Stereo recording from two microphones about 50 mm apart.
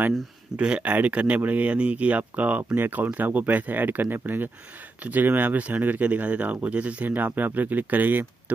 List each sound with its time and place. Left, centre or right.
0.6 s speech: right